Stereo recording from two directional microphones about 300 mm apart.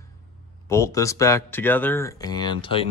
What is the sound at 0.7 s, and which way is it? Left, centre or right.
Speech, centre.